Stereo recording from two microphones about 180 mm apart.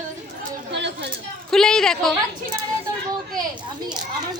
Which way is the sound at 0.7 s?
70° right (ahead or behind).